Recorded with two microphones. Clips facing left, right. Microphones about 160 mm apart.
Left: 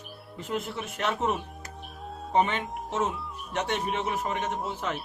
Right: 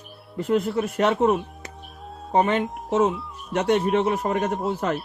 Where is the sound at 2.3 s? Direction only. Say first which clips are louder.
Right 4 dB; 60° right (ahead or behind).